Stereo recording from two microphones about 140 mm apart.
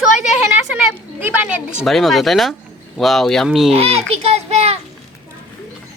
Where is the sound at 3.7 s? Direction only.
45° right (ahead or behind).